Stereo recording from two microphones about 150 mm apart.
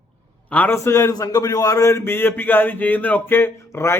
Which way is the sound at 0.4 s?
10° left (ahead or behind).